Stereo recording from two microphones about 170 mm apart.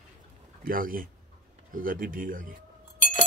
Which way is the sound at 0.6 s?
55° right (ahead or behind).